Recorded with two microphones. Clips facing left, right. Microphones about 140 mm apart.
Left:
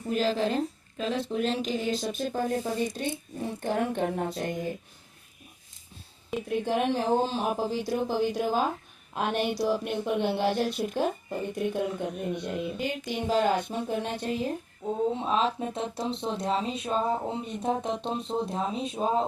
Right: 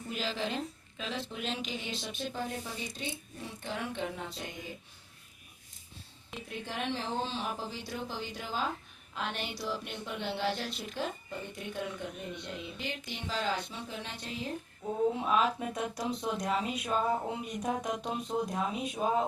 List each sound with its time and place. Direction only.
0.1 s a woman's voice: 40° left (ahead or behind)
6.5 s a woman's voice: 55° left (ahead or behind)
14.8 s speech: 25° left (ahead or behind)